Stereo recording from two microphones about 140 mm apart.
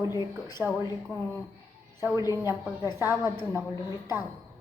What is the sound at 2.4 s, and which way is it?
A woman's voice, 15° right (ahead or behind).